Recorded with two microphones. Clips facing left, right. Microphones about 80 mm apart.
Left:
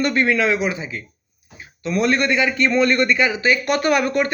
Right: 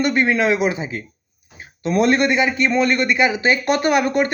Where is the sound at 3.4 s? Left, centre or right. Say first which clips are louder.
Right 1 dB; right.